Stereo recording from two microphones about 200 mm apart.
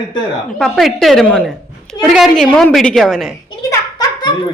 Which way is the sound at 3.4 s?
20° left (ahead or behind).